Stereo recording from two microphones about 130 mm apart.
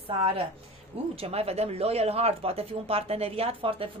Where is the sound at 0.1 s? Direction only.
45° right (ahead or behind).